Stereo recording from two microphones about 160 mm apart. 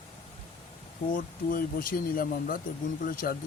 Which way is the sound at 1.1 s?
60° left (ahead or behind).